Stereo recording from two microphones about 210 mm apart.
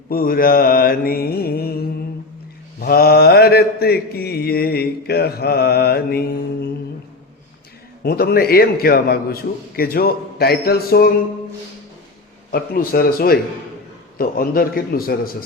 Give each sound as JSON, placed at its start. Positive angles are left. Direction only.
{"t": 0.1, "sound": "mantra", "side_deg": 45}
{"t": 2.8, "sound": "mantra", "side_deg": 45}
{"t": 8.0, "sound": "mantra", "side_deg": 45}
{"t": 12.5, "sound": "mantra", "side_deg": 45}